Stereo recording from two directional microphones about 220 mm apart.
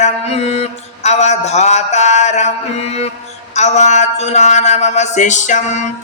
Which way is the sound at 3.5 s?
30° left (ahead or behind).